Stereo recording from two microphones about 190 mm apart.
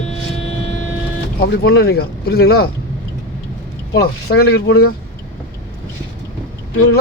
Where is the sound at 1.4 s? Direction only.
55° left (ahead or behind).